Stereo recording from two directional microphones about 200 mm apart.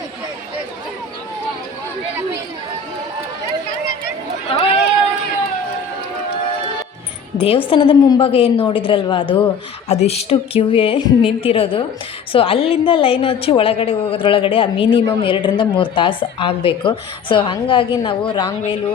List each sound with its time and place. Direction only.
4.5 s run: 30° left (ahead or behind)
7.3 s a woman's voice: 30° left (ahead or behind)